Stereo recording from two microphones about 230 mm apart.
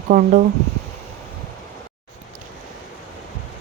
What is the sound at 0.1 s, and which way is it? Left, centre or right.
Speech, right.